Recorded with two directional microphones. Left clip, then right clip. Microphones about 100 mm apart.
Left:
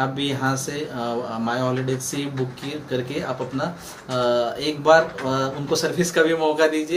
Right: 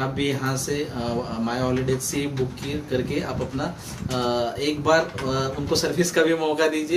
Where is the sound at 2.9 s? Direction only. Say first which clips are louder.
Left 1 dB; 20° left (ahead or behind).